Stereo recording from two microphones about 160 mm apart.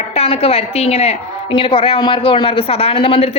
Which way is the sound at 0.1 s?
40° left (ahead or behind).